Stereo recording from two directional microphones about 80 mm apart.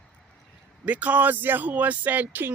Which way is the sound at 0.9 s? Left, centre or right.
Centre.